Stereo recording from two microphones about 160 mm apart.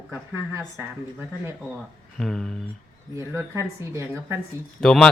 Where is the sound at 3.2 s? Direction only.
20° right (ahead or behind).